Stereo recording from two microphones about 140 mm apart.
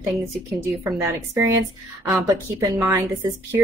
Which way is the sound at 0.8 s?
20° right (ahead or behind).